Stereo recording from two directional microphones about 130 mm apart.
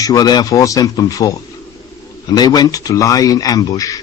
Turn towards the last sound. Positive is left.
turn(degrees=25)  # may be behind; listen again after turning